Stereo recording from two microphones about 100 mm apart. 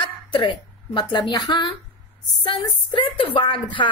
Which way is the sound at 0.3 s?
55° left (ahead or behind).